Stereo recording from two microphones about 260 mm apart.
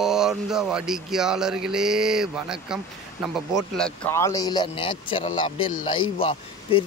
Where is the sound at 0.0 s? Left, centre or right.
Centre.